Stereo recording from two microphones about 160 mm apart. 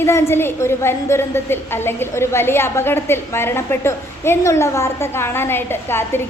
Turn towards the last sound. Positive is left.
turn(degrees=15)  # may be behind; listen again after turning